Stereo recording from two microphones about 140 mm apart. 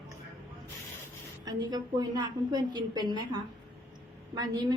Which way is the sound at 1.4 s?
30° right (ahead or behind).